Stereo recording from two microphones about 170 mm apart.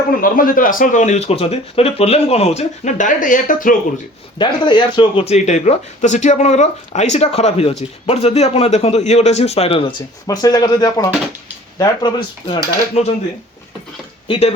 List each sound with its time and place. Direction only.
0.2 s speech: 55° left (ahead or behind)
4.4 s speech: 25° left (ahead or behind)
10.2 s speech: 20° left (ahead or behind)
14.3 s speech: 35° left (ahead or behind)